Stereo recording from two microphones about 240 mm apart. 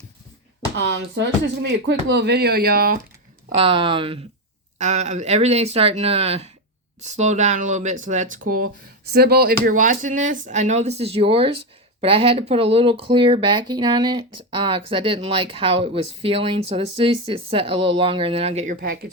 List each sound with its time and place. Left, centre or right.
0.8 s speech: right
3.6 s speech: right